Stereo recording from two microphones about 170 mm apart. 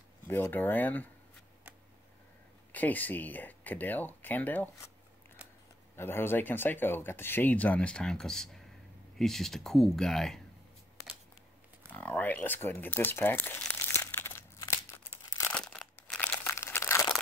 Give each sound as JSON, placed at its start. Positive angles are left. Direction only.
{"t": 0.3, "sound": "speech", "side_deg": 10}
{"t": 2.7, "sound": "speech", "side_deg": 10}
{"t": 5.9, "sound": "speech", "side_deg": 15}
{"t": 11.9, "sound": "speech", "side_deg": 10}
{"t": 15.2, "sound": "crumpling", "side_deg": 20}
{"t": 15.5, "sound": "crumpling", "side_deg": 5}